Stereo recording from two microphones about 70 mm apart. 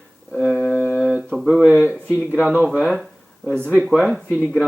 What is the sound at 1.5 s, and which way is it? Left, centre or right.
Speech, centre.